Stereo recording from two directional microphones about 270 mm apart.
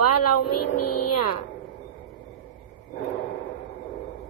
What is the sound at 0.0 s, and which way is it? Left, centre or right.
A woman's voice, left.